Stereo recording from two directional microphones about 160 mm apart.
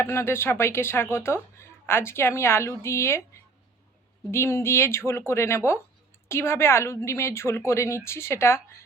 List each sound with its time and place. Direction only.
0.0 s speech: 15° left (ahead or behind)
4.3 s speech: 15° left (ahead or behind)